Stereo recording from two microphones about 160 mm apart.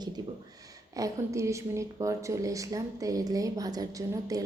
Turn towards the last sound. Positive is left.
turn(degrees=-25)  # may be behind; listen again after turning